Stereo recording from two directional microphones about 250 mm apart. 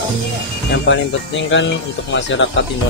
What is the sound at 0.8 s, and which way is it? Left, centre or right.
Speech, left.